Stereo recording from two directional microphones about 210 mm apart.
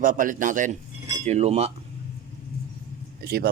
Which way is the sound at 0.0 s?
40° right (ahead or behind).